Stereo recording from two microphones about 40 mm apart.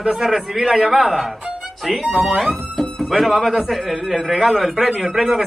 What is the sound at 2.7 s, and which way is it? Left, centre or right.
Music, centre.